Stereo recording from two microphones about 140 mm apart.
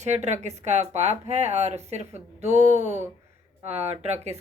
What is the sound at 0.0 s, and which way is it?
Speech, 55° right (ahead or behind).